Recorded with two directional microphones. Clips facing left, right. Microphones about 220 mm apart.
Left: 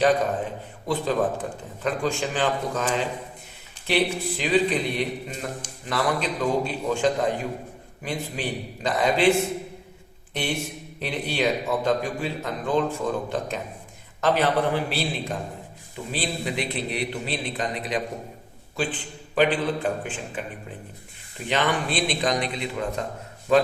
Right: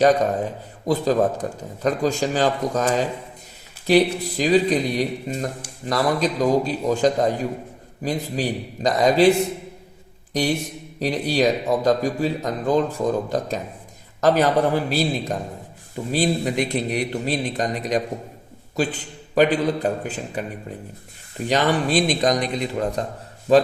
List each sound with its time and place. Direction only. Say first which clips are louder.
0.9 s a man's voice: right 5 dB; 40° right (ahead or behind)
11.0 s a man's voice: right 6 dB; 40° right (ahead or behind)
21.4 s a man's voice: right 5 dB; 40° right (ahead or behind)